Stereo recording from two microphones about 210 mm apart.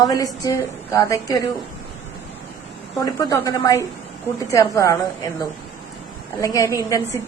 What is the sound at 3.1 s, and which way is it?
A woman's voice, 15° left (ahead or behind).